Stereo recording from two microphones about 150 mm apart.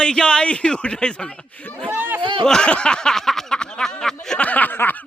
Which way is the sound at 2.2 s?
35° right (ahead or behind).